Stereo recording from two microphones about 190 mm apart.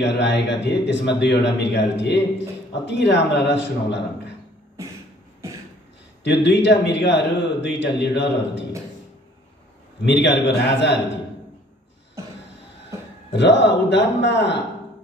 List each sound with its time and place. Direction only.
0.0 s speech: 65° left (ahead or behind)
6.2 s a man's voice: 65° left (ahead or behind)
10.0 s a man's voice: 65° left (ahead or behind)
12.2 s a sound: 15° right (ahead or behind)
13.3 s a man's voice: 65° left (ahead or behind)